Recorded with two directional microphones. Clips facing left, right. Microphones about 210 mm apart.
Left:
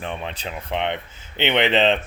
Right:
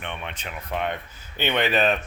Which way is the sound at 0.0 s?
30° left (ahead or behind).